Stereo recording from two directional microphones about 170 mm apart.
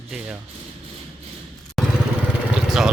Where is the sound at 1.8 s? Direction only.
Centre (ahead or behind).